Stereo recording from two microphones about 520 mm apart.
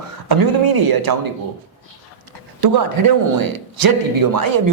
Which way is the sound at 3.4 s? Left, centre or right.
Right.